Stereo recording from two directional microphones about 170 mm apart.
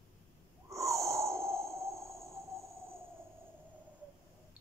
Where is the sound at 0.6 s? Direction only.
15° right (ahead or behind).